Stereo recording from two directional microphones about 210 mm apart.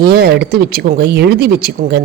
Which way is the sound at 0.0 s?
50° right (ahead or behind).